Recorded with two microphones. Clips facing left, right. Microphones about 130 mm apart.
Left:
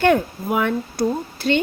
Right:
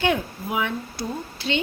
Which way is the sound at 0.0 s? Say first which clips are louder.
Left 6 dB; 50° left (ahead or behind).